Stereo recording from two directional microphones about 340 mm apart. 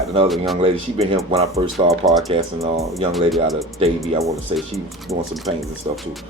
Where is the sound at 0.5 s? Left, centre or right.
Centre.